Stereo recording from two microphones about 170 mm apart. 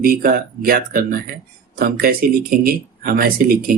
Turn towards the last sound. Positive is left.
turn(degrees=-60)  # may be behind; listen again after turning